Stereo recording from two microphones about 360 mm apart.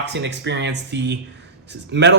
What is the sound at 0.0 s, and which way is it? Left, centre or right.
Speech, right.